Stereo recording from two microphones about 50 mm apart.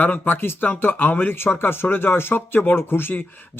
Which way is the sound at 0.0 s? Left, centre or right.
Left.